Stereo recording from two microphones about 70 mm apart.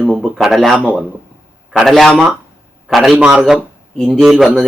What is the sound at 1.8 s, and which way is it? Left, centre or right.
A man's voice, centre.